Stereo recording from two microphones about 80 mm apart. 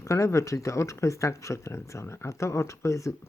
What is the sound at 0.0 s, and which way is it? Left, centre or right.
Speech, left.